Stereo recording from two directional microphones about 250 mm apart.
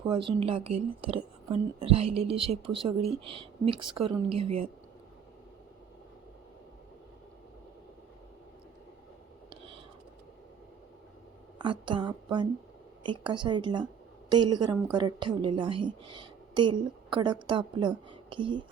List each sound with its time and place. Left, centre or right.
0.1 s a woman's voice: centre
11.6 s a woman's voice: centre